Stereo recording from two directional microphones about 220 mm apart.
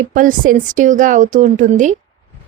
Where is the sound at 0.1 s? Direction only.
35° right (ahead or behind).